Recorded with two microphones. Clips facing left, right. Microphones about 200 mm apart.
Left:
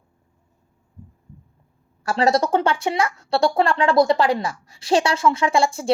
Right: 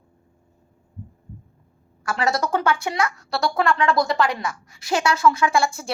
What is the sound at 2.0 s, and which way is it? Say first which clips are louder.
Speech: left 4 dB; 30° left (ahead or behind).